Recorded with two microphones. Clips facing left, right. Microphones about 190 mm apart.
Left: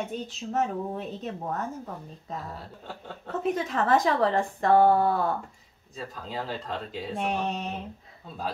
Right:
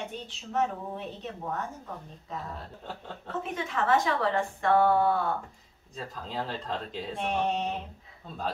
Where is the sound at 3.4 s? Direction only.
40° left (ahead or behind).